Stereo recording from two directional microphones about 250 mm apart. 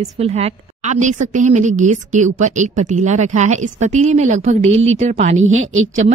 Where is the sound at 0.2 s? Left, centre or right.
Right.